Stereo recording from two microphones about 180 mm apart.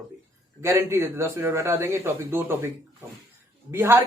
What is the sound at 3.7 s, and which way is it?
Speech, 15° right (ahead or behind).